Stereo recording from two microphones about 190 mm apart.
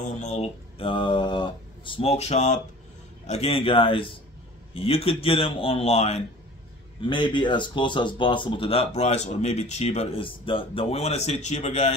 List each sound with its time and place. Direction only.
0.0 s a man's voice: 40° left (ahead or behind)